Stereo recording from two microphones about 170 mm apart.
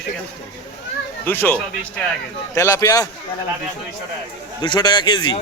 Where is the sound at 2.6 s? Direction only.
20° left (ahead or behind).